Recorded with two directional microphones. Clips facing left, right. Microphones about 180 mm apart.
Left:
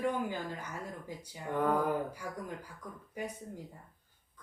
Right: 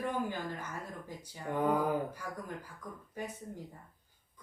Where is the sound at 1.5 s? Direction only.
10° right (ahead or behind).